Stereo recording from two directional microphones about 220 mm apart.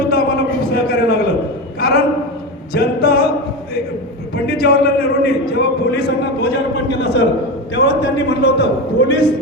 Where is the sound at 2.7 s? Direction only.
45° left (ahead or behind).